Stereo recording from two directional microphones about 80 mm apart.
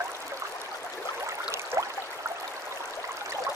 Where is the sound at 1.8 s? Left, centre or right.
Right.